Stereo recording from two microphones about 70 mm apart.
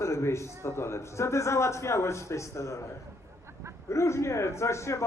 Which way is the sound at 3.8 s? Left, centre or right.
Left.